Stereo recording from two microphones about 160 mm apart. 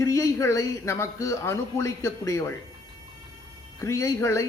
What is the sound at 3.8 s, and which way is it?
Speech, 20° left (ahead or behind).